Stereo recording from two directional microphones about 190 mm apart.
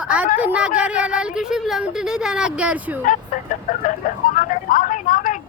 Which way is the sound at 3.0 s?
45° left (ahead or behind).